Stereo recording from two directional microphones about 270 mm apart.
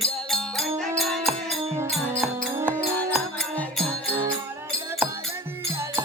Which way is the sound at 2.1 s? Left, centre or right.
Centre.